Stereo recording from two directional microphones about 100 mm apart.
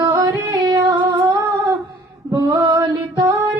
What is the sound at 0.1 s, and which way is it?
Music, 40° right (ahead or behind).